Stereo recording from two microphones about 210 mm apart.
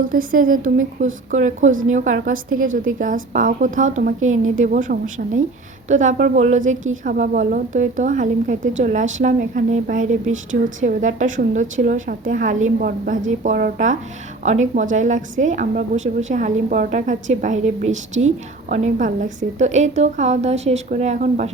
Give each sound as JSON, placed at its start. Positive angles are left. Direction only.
{"t": 0.0, "sound": "a woman's voice", "side_deg": -40}